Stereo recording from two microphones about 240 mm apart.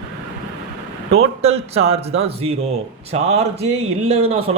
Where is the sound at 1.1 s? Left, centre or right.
Right.